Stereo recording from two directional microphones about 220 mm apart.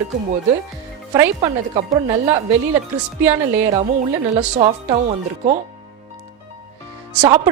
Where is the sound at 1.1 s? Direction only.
15° right (ahead or behind).